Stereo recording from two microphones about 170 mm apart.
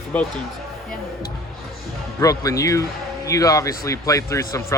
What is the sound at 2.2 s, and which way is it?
A man's voice, 20° left (ahead or behind).